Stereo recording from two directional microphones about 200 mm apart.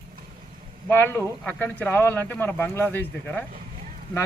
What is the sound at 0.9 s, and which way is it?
Speech, 10° left (ahead or behind).